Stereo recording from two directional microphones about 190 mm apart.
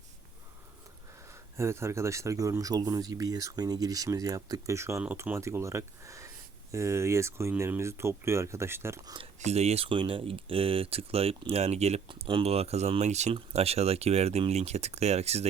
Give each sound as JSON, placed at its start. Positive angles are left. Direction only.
{"t": 1.5, "sound": "speech", "side_deg": -15}
{"t": 9.1, "sound": "speech", "side_deg": -35}